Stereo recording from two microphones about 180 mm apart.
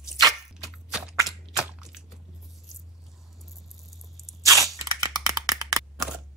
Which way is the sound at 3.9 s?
Centre (ahead or behind).